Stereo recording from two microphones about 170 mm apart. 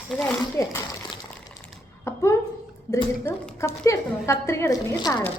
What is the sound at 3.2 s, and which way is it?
A woman's voice, 15° left (ahead or behind).